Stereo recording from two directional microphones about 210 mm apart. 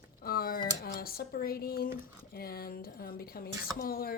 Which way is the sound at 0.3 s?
45° left (ahead or behind).